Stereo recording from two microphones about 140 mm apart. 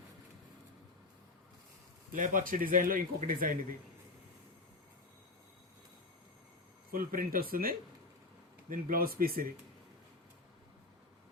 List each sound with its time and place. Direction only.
2.1 s speech: 70° right (ahead or behind)
6.9 s speech: 85° right